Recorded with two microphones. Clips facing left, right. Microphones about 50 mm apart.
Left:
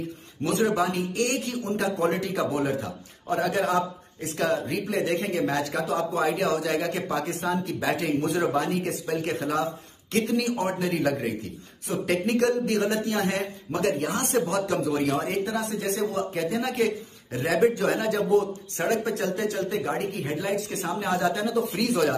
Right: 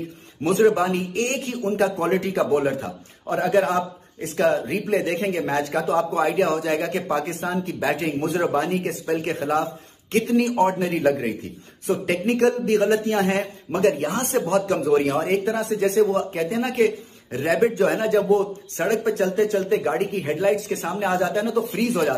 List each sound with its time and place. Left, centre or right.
0.4 s a man's voice: right